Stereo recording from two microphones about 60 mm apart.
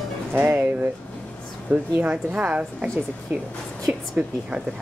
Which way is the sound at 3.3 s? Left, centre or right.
Right.